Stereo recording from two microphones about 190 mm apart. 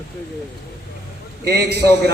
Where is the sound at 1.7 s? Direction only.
60° right (ahead or behind).